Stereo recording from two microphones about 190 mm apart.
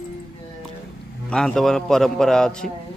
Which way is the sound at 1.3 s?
5° left (ahead or behind).